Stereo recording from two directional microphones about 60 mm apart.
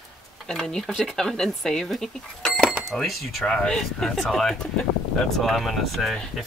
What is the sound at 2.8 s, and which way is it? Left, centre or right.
Speech, centre.